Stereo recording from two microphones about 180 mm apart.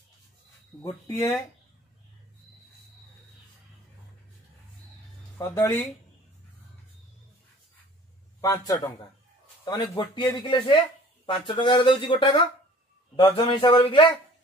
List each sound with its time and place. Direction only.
0.8 s speech: 15° left (ahead or behind)
5.4 s speech: 15° left (ahead or behind)
8.4 s speech: 20° left (ahead or behind)